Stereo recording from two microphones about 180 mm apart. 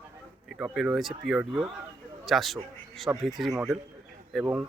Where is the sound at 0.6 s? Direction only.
5° right (ahead or behind).